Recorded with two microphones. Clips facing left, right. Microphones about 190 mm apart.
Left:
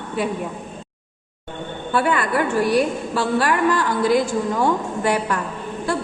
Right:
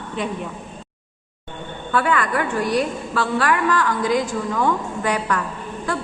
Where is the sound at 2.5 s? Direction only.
5° left (ahead or behind).